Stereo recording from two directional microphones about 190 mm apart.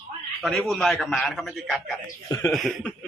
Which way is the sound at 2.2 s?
15° left (ahead or behind).